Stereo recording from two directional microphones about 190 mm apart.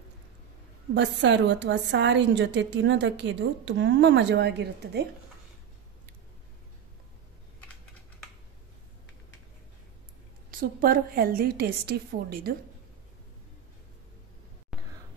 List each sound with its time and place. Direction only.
0.9 s a woman's voice: 65° right (ahead or behind)
10.6 s a woman's voice: 50° right (ahead or behind)
14.7 s a sound: 5° right (ahead or behind)